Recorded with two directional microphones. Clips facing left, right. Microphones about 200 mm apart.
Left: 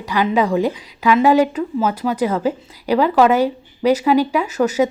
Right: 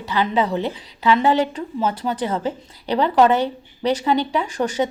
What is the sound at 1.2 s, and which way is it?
Speech, 10° left (ahead or behind).